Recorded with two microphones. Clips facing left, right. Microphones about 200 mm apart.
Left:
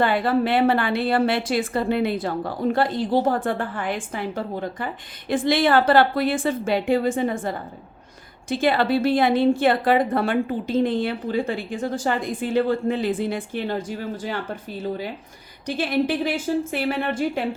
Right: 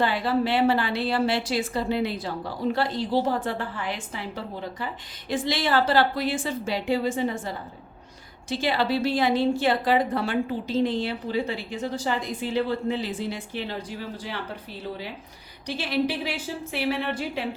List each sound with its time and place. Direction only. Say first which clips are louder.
0.0 s a woman's voice: left 4 dB; 55° left (ahead or behind)